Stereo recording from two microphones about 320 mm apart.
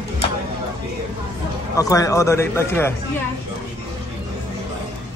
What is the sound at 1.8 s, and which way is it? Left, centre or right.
A man's voice, centre.